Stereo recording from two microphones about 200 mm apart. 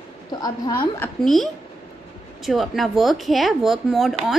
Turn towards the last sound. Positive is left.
turn(degrees=0)  # may be behind; listen again after turning